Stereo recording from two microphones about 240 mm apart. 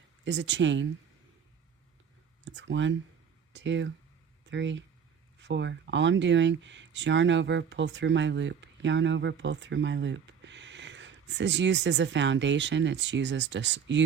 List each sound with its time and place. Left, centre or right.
0.3 s speech: right
2.4 s speech: right